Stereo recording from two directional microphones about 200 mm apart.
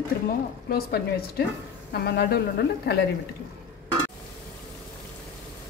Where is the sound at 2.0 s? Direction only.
55° left (ahead or behind).